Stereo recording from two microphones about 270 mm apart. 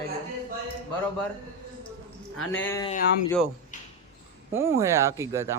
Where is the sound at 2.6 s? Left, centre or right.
Centre.